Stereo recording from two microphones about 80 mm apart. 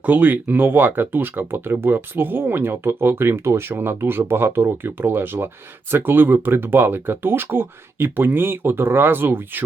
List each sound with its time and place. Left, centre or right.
0.0 s speech: right